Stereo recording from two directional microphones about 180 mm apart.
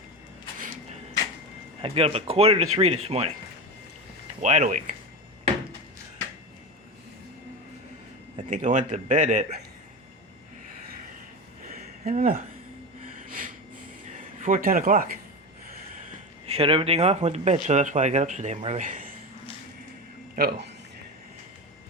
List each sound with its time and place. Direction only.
1.8 s speech: 35° right (ahead or behind)
4.4 s speech: 40° right (ahead or behind)
8.4 s a man's voice: 45° right (ahead or behind)
12.1 s a man's voice: 50° right (ahead or behind)
13.1 s snort: 50° right (ahead or behind)
14.4 s a man's voice: 50° right (ahead or behind)
16.6 s speech: 30° right (ahead or behind); by 19.1 s 50° right (ahead or behind)
20.3 s speech: 60° right (ahead or behind)